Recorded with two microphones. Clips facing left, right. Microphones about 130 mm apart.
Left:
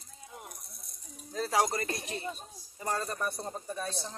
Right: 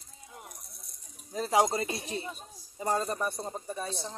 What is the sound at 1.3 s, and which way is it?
A man's voice, 20° right (ahead or behind).